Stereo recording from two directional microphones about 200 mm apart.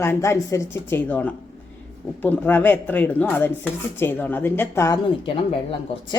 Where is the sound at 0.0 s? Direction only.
15° left (ahead or behind).